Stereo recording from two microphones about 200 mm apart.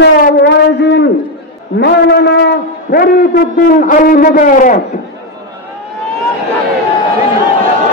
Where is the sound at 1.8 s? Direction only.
55° left (ahead or behind).